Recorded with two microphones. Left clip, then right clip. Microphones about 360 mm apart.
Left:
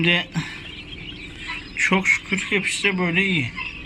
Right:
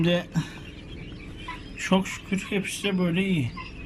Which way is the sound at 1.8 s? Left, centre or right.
Centre.